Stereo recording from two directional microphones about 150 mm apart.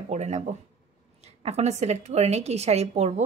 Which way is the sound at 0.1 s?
50° right (ahead or behind).